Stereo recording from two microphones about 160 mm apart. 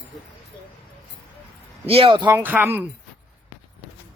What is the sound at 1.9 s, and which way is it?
Speech, 35° right (ahead or behind).